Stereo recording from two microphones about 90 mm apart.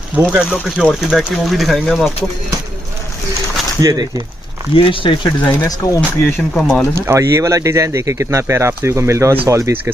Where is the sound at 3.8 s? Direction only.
45° right (ahead or behind).